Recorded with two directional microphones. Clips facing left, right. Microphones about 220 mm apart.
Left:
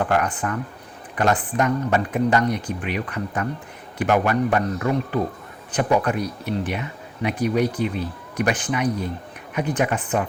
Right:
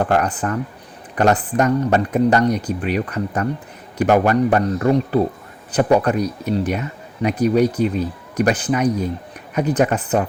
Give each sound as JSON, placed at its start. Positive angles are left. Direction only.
{"t": 0.0, "sound": "speech", "side_deg": -35}